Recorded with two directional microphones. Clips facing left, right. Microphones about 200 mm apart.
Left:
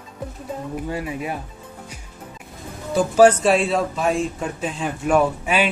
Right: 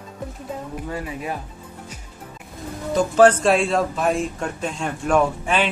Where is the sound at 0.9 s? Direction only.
10° left (ahead or behind).